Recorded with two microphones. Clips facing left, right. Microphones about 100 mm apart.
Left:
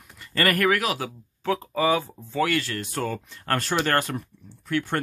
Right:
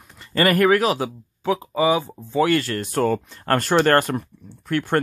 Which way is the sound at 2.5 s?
45° right (ahead or behind).